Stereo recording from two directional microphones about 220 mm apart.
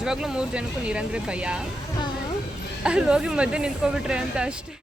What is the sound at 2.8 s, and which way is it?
A woman's voice, 5° right (ahead or behind).